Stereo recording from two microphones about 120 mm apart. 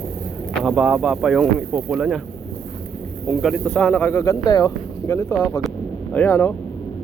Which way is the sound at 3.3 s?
Centre (ahead or behind).